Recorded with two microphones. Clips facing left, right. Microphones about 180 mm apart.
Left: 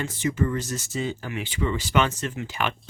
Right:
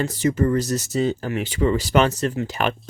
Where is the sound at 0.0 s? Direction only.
40° right (ahead or behind).